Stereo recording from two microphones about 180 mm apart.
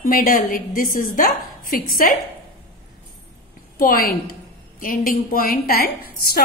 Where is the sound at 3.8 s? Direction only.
55° left (ahead or behind).